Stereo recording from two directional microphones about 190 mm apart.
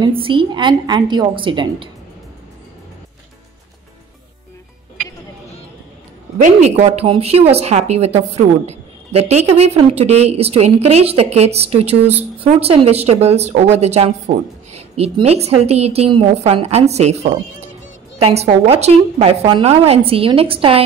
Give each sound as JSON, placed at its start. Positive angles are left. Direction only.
{"t": 0.0, "sound": "a woman's voice", "side_deg": -25}
{"t": 6.3, "sound": "speech", "side_deg": -40}